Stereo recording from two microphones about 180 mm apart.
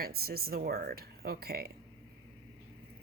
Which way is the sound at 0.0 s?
60° right (ahead or behind).